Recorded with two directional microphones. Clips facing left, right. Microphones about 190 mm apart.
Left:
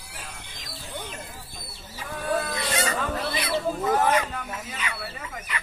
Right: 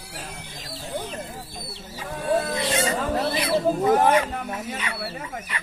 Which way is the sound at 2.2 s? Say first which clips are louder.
Right 4 dB; 30° right (ahead or behind).